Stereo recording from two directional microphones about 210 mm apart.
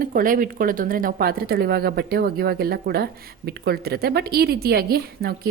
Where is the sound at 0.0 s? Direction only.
40° right (ahead or behind).